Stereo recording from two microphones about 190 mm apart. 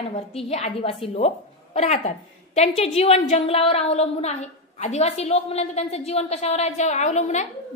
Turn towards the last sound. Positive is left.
turn(degrees=40)  # may be behind; listen again after turning